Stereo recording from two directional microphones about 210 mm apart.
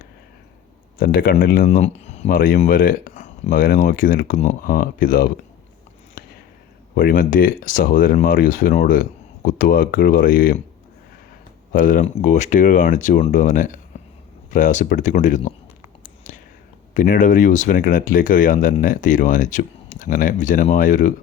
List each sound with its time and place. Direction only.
0.9 s speech: 45° left (ahead or behind)
6.2 s a sound: 40° left (ahead or behind)
6.9 s speech: 40° left (ahead or behind)
11.7 s speech: 40° left (ahead or behind)
16.9 s speech: 40° left (ahead or behind)